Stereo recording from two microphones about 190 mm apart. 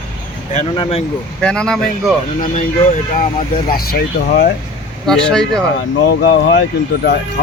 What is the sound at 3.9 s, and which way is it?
Speech, 55° left (ahead or behind).